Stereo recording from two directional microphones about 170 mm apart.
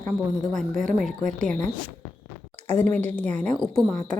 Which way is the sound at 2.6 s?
40° right (ahead or behind).